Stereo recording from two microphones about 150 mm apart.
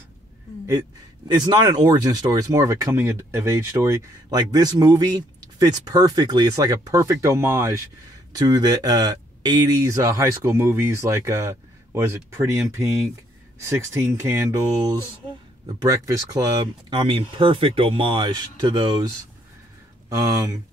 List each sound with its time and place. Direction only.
1.2 s speech: 30° right (ahead or behind)
15.8 s speech: 20° right (ahead or behind)
16.9 s speech: 35° right (ahead or behind)